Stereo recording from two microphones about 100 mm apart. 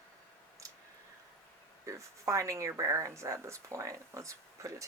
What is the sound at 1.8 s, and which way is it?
A woman's voice, 30° right (ahead or behind).